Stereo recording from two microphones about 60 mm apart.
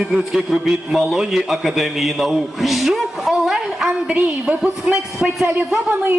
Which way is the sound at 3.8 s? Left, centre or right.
Centre.